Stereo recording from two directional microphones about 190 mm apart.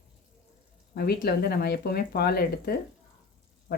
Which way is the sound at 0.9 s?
55° left (ahead or behind).